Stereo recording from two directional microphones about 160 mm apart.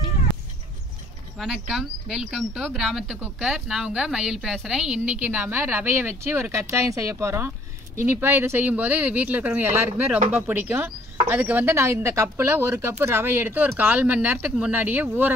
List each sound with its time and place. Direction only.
1.4 s speech: centre (ahead or behind)